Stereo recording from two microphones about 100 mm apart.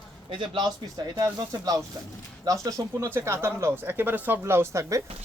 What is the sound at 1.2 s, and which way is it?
Speech, 40° right (ahead or behind).